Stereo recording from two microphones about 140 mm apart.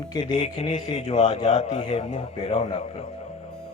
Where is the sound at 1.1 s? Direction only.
55° left (ahead or behind).